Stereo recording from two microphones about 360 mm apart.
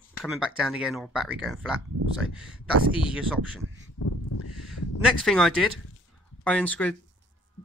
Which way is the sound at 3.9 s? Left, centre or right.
Left.